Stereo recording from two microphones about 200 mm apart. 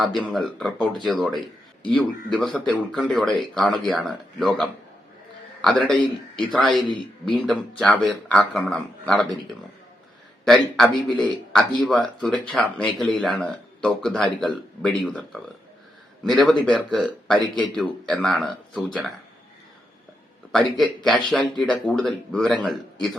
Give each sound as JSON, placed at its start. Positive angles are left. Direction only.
{"t": 0.0, "sound": "speech", "side_deg": 0}
{"t": 10.4, "sound": "speech", "side_deg": 0}
{"t": 20.5, "sound": "speech", "side_deg": 0}